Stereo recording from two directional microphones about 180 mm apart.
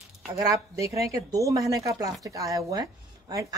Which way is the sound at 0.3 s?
15° right (ahead or behind).